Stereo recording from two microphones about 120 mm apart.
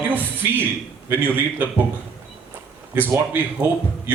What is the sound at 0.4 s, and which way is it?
A man's voice, 20° right (ahead or behind).